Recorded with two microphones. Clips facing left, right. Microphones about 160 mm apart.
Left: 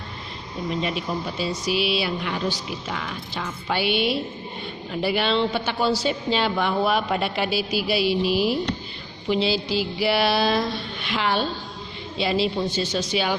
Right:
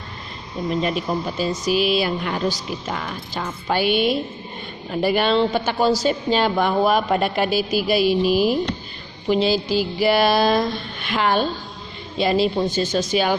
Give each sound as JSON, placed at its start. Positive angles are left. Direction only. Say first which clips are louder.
{"t": 0.7, "sound": "a woman's voice", "louder": "right 4 dB", "side_deg": -45}